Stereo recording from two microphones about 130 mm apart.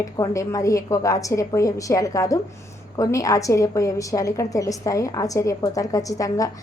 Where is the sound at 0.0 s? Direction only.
25° left (ahead or behind).